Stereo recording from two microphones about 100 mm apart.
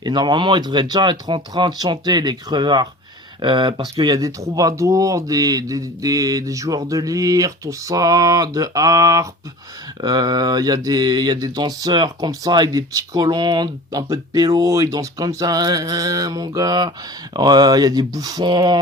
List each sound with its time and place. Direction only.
0.0 s speech: 45° right (ahead or behind)
14.1 s speech: 35° right (ahead or behind)